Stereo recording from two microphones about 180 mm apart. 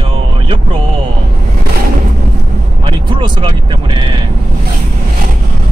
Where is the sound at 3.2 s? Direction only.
25° right (ahead or behind).